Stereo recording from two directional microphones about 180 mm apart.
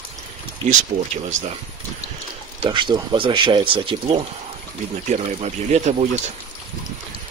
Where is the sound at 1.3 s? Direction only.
40° right (ahead or behind).